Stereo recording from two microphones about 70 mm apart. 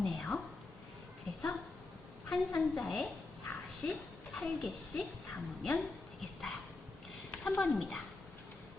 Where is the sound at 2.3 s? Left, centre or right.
Centre.